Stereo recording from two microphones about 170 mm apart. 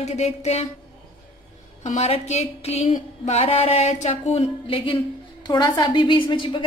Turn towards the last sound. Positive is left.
turn(degrees=30)  # may be behind; listen again after turning